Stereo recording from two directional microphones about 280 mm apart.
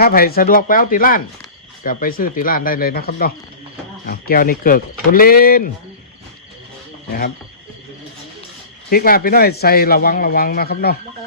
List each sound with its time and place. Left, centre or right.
0.0 s speech: left
8.9 s speech: left